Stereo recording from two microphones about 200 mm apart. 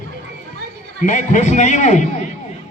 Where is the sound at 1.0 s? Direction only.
40° left (ahead or behind).